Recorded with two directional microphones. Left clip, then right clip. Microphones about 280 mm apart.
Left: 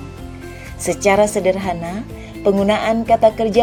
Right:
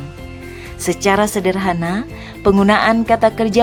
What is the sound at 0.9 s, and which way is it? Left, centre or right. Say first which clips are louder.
A woman's voice: left 1 dB; centre.